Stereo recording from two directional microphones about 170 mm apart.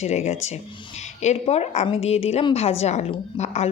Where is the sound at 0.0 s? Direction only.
40° left (ahead or behind).